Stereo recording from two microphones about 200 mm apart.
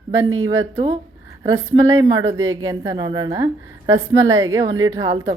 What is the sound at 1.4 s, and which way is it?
A woman's voice, 15° right (ahead or behind).